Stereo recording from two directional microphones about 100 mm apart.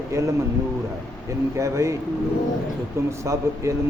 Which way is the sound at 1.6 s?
30° right (ahead or behind).